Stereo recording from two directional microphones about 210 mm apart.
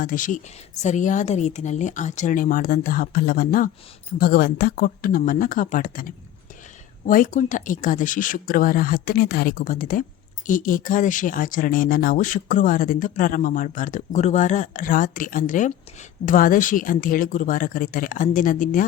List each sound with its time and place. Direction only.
0.0 s speech: 40° left (ahead or behind)